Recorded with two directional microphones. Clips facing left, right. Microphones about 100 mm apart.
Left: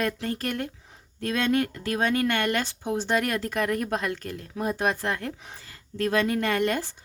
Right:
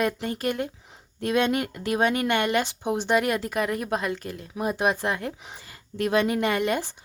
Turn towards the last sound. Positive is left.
turn(degrees=-10)  # may be behind; listen again after turning